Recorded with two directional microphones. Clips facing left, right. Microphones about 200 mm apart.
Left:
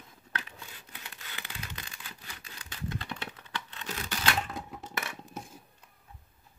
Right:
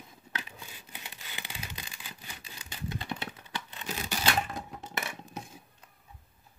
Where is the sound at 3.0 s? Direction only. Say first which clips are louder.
Right 2 dB; 10° right (ahead or behind).